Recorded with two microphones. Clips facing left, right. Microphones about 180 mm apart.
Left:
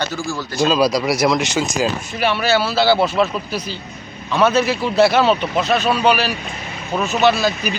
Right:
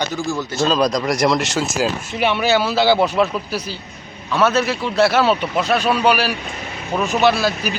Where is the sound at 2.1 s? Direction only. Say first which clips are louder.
Right 1 dB; 20° right (ahead or behind).